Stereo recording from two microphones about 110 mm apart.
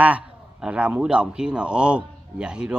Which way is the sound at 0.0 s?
10° right (ahead or behind).